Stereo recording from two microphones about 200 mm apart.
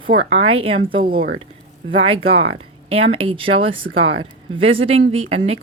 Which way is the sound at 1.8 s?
25° right (ahead or behind).